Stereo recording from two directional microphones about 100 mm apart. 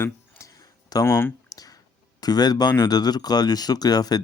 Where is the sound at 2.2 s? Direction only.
40° left (ahead or behind).